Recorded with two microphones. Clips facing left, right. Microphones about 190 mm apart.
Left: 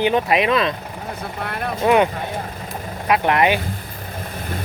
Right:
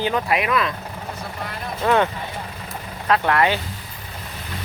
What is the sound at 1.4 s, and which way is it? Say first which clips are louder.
Speech: left 6 dB; 60° left (ahead or behind).